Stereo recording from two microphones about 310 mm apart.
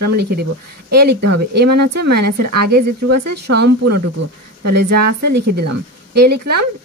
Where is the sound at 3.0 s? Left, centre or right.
Right.